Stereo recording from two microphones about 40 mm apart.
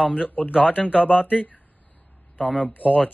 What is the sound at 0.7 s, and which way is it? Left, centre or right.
Speech, right.